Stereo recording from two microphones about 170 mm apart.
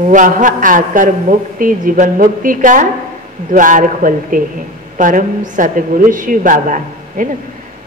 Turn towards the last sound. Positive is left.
turn(degrees=-50)  # may be behind; listen again after turning